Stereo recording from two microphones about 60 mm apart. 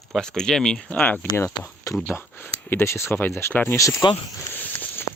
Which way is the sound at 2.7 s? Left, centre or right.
Left.